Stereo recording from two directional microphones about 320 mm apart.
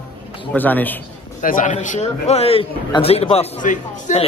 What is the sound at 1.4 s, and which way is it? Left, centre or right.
A man's voice, left.